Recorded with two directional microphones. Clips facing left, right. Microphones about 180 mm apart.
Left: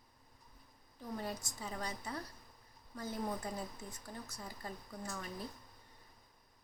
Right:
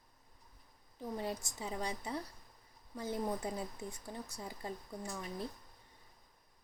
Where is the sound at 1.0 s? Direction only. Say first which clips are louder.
Right 3 dB; 25° right (ahead or behind).